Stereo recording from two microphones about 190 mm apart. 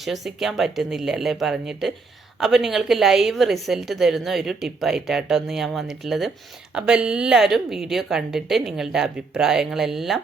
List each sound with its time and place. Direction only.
0.0 s speech: centre (ahead or behind)